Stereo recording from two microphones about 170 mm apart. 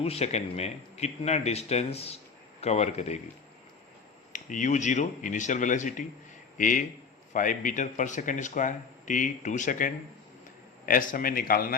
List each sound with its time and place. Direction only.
0.0 s speech: 35° left (ahead or behind)
4.3 s a man's voice: 45° left (ahead or behind)